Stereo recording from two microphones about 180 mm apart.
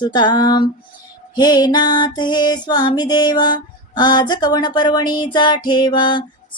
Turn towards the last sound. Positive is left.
turn(degrees=25)  # may be behind; listen again after turning